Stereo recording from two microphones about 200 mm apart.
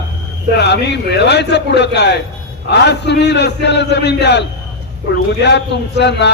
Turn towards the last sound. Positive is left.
turn(degrees=60)  # may be behind; listen again after turning